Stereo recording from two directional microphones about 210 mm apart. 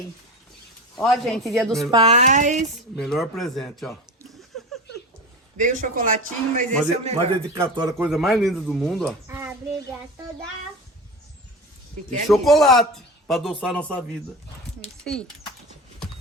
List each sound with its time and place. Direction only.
0.9 s speech: centre (ahead or behind)
1.9 s speech: 30° right (ahead or behind)
2.9 s speech: centre (ahead or behind)
5.5 s speech: 40° right (ahead or behind)
7.5 s speech: 15° right (ahead or behind)
8.0 s speech: centre (ahead or behind)
9.2 s speech: 10° right (ahead or behind)
12.3 s speech: centre (ahead or behind)
15.0 s speech: 5° left (ahead or behind)